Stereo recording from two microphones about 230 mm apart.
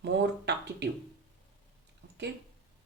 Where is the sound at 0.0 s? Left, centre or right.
Right.